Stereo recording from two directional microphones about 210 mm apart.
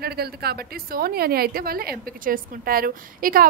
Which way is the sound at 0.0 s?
50° right (ahead or behind).